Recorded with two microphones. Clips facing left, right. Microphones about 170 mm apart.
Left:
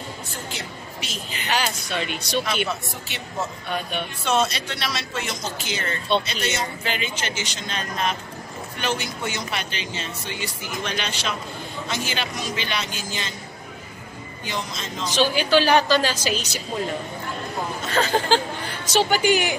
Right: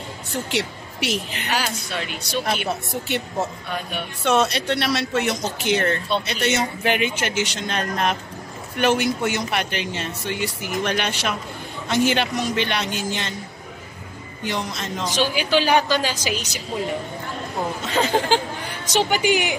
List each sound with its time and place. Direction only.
0.3 s a woman's voice: 75° right (ahead or behind)
1.5 s a woman's voice: 5° right (ahead or behind)
2.5 s speech: 40° right (ahead or behind)
4.2 s speech: 65° right (ahead or behind)
14.4 s speech: 65° right (ahead or behind)
15.0 s a woman's voice: 15° right (ahead or behind)
17.8 s a woman's voice: 20° right (ahead or behind)